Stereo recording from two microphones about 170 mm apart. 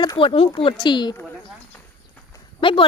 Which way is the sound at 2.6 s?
30° left (ahead or behind).